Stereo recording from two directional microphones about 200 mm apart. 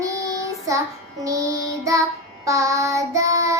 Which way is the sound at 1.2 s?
15° right (ahead or behind).